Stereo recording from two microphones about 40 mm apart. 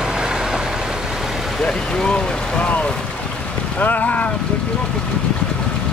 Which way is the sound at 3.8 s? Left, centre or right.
Left.